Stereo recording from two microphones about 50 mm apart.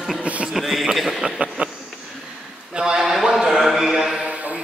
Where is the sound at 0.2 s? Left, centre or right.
Right.